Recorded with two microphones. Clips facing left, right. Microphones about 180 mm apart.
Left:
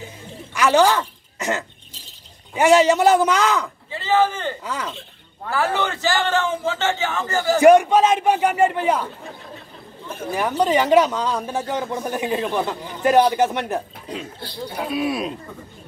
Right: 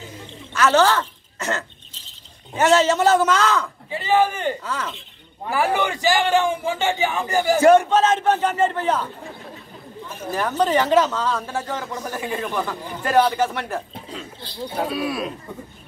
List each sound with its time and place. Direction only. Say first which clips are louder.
0.6 s a man's voice: left 1 dB; 15° left (ahead or behind)
3.9 s a man's voice: even; 15° right (ahead or behind)
4.6 s a man's voice: even; 15° left (ahead or behind)
5.4 s a man's voice: right 1 dB; 15° right (ahead or behind)
7.6 s a man's voice: left 3 dB; 15° left (ahead or behind)
10.3 s a man's voice: left 1 dB; 10° left (ahead or behind)